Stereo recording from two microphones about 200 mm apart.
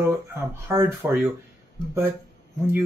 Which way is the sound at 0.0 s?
10° right (ahead or behind).